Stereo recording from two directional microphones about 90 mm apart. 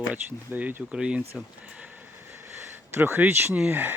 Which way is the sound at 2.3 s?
25° right (ahead or behind).